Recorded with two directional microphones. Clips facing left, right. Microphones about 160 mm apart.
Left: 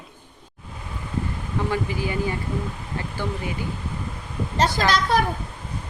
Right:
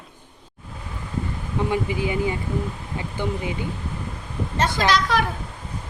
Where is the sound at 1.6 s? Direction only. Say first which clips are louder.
Right 2 dB; 20° right (ahead or behind).